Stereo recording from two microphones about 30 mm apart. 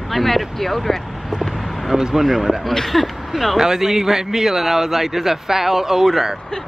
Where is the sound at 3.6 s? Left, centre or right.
Centre.